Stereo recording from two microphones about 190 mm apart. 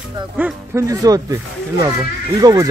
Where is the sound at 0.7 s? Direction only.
15° right (ahead or behind).